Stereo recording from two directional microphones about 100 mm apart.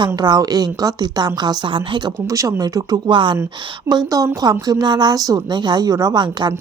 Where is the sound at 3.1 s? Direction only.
55° right (ahead or behind).